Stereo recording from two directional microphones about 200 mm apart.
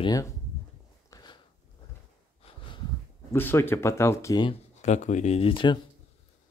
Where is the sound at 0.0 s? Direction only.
20° left (ahead or behind).